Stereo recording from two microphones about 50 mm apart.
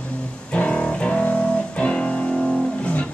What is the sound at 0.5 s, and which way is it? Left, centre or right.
Music, left.